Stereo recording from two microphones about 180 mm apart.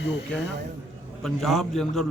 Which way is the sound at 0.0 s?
75° left (ahead or behind).